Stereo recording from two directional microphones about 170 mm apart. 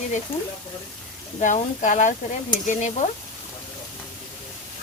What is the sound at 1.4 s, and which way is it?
Stir, 45° left (ahead or behind).